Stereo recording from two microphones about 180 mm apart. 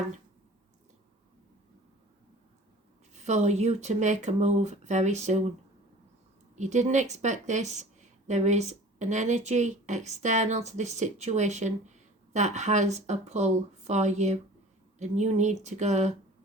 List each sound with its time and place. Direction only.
3.1 s speech: 40° right (ahead or behind)
6.6 s speech: 40° right (ahead or behind)